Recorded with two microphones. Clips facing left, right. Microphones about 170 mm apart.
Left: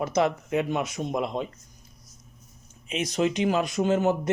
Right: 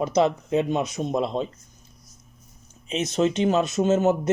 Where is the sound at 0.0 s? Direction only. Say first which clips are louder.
Right 3 dB; 20° right (ahead or behind).